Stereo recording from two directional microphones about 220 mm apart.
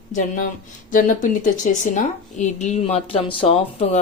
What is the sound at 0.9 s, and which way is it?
Speech, 35° left (ahead or behind).